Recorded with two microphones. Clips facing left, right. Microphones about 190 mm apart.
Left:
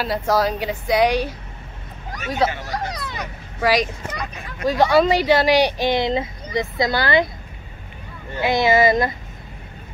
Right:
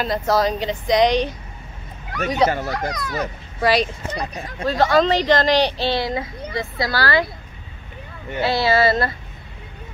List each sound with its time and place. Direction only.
0.0 s speech: 10° left (ahead or behind)
2.9 s speech: 30° left (ahead or behind)
3.2 s speech: 10° left (ahead or behind)
4.1 s speech: 35° right (ahead or behind)
4.6 s speech: 15° left (ahead or behind)
8.4 s speech: 15° left (ahead or behind)